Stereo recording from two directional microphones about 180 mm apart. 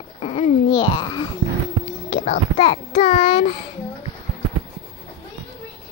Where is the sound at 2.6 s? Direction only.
30° left (ahead or behind).